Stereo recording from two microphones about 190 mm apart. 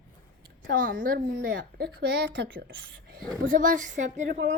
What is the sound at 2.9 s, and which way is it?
Speech, 50° right (ahead or behind).